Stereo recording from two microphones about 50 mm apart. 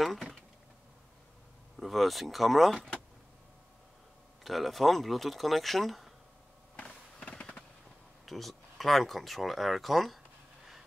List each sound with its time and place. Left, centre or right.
0.0 s speech: centre
1.8 s speech: centre
4.4 s speech: centre
6.8 s fireworks: left
8.3 s speech: centre